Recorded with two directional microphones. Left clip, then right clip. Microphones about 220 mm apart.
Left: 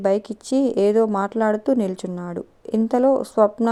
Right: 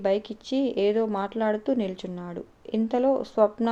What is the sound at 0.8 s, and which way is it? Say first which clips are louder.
Speech: left 6 dB; 45° left (ahead or behind).